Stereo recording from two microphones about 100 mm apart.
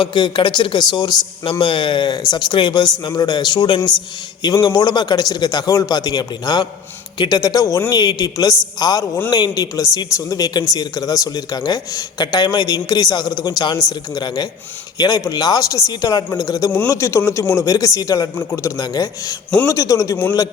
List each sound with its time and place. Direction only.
0.0 s speech: 55° left (ahead or behind); by 20.2 s 35° left (ahead or behind)